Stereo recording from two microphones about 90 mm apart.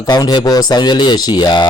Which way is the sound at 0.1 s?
50° left (ahead or behind).